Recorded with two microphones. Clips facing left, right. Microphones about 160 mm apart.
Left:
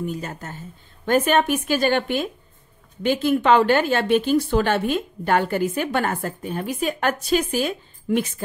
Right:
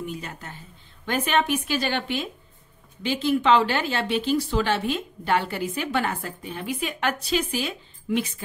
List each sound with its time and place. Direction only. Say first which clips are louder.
0.0 s speech: left 5 dB; 40° left (ahead or behind)